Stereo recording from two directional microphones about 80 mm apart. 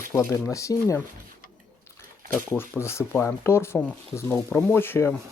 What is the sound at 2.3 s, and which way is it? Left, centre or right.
Speech, left.